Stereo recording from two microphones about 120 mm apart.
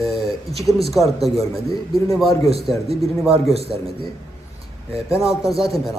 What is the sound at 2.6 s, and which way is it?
Speech, centre (ahead or behind).